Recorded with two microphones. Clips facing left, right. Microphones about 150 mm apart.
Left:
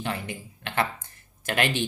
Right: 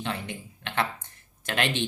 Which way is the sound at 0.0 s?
5° left (ahead or behind).